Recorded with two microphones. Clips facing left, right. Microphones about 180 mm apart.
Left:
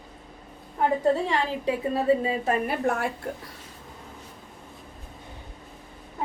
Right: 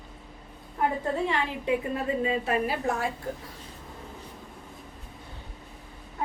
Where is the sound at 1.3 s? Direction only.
35° left (ahead or behind).